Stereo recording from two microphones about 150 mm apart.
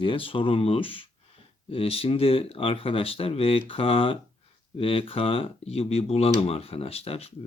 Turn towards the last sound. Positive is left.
turn(degrees=40)  # may be behind; listen again after turning